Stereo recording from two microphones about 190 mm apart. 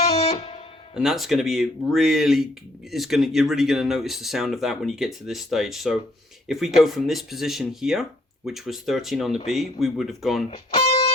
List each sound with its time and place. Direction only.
0.0 s music: 35° left (ahead or behind)
0.9 s speech: centre (ahead or behind)
10.5 s speech: 30° left (ahead or behind)